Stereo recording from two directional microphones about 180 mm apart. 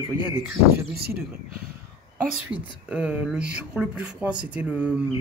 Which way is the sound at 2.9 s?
10° right (ahead or behind).